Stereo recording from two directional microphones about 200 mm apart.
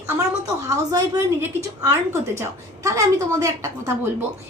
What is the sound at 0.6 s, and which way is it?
A woman's voice, 15° right (ahead or behind).